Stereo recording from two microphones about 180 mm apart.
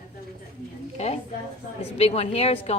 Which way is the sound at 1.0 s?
35° left (ahead or behind).